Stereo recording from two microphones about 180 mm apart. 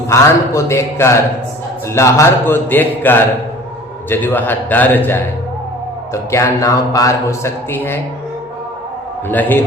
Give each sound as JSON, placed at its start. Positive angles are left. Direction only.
{"t": 0.1, "sound": "speech", "side_deg": 15}
{"t": 6.3, "sound": "speech", "side_deg": 15}
{"t": 9.3, "sound": "speech", "side_deg": 10}